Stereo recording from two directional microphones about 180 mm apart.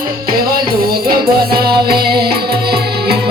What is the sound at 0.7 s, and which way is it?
Music, 55° right (ahead or behind).